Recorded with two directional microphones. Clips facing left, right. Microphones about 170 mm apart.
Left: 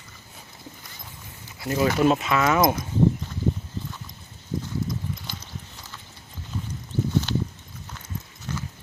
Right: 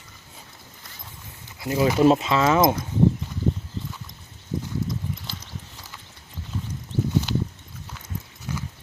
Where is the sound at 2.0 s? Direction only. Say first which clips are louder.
Right 5 dB; 25° right (ahead or behind).